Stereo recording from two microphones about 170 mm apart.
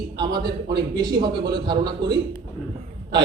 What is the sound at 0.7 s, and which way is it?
A man's voice, 25° right (ahead or behind).